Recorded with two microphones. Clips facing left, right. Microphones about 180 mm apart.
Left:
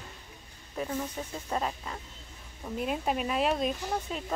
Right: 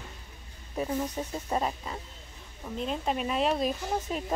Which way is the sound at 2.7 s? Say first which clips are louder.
Even; 10° left (ahead or behind).